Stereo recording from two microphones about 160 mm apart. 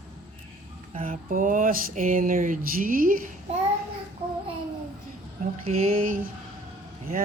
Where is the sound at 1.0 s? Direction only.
55° right (ahead or behind).